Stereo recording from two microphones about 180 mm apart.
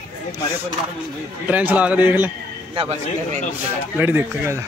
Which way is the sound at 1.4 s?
10° right (ahead or behind).